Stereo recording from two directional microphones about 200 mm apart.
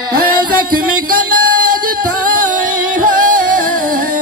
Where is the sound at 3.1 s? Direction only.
40° right (ahead or behind).